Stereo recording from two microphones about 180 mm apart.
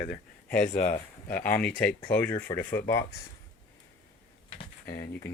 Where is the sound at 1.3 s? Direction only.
10° left (ahead or behind).